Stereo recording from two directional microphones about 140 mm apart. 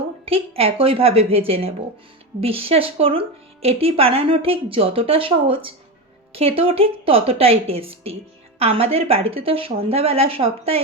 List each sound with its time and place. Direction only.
0.3 s a woman's voice: 45° right (ahead or behind)